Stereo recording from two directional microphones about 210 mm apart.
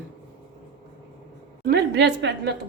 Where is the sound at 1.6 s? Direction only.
50° right (ahead or behind).